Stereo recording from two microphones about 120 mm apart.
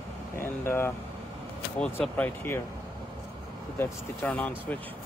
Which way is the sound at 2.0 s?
10° left (ahead or behind).